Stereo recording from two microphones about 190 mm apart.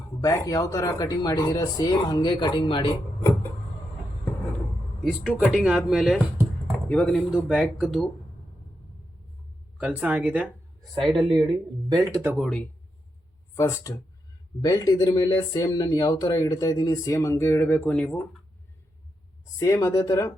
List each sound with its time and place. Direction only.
0.2 s speech: 20° left (ahead or behind)
5.5 s speech: 5° right (ahead or behind)
9.7 s speech: 5° right (ahead or behind)
11.9 s speech: 20° right (ahead or behind)
12.4 s speech: 5° left (ahead or behind)
13.6 s speech: 15° left (ahead or behind)
19.5 s speech: 15° left (ahead or behind)